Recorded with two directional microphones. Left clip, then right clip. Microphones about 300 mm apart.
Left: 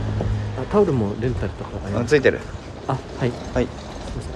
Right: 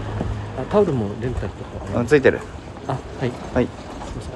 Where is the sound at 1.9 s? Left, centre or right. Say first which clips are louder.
Right 2 dB; centre.